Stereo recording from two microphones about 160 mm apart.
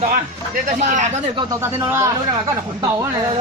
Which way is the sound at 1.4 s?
25° right (ahead or behind).